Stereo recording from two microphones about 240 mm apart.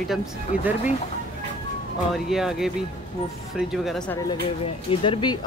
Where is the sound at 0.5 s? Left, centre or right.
Centre.